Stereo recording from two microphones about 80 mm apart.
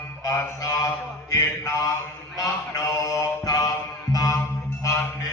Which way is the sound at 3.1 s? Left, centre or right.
Left.